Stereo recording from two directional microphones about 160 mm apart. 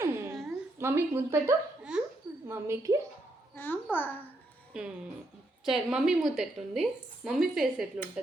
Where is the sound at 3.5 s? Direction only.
15° left (ahead or behind).